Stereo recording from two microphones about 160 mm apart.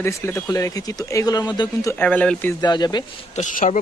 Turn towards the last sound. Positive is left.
turn(degrees=45)  # may be behind; listen again after turning